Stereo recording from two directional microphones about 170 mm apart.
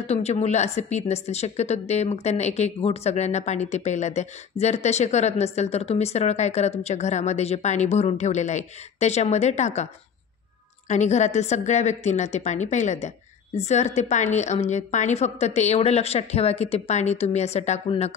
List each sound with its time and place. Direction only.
0.0 s a woman's voice: 40° left (ahead or behind)
10.9 s a woman's voice: 45° left (ahead or behind)